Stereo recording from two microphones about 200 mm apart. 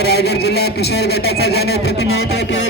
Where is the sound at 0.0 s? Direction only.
55° left (ahead or behind).